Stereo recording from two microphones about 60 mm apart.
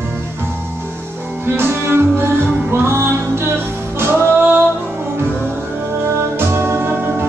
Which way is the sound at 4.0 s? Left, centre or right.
Right.